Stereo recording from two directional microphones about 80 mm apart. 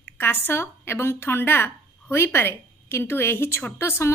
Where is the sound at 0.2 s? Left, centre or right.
Left.